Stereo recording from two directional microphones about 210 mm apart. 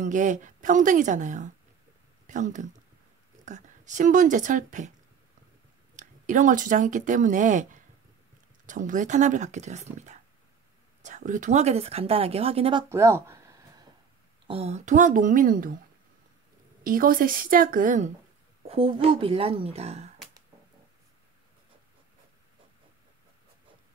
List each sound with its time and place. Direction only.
0.0 s speech: 35° right (ahead or behind)
5.9 s speech: 35° right (ahead or behind)
12.9 s a sound: 10° right (ahead or behind)
14.5 s speech: 30° right (ahead or behind)
16.8 s speech: 40° right (ahead or behind)
18.7 s speech: 25° right (ahead or behind)